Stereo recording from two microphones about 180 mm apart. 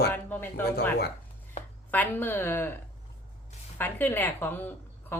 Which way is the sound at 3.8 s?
10° left (ahead or behind).